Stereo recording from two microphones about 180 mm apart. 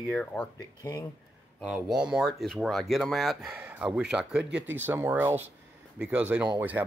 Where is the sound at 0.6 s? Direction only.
20° left (ahead or behind).